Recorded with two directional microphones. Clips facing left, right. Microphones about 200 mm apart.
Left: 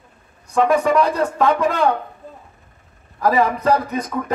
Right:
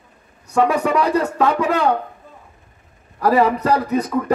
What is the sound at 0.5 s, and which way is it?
A man's voice, 10° right (ahead or behind).